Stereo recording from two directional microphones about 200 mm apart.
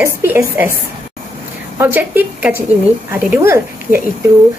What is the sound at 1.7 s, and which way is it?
Speech, 10° right (ahead or behind).